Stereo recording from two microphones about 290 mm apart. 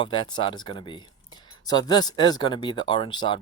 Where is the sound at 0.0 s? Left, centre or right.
Centre.